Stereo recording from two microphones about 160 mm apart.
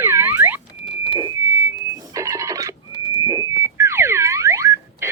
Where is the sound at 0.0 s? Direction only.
15° right (ahead or behind).